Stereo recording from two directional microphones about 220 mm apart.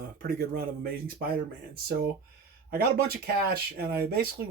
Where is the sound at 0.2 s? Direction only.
45° right (ahead or behind).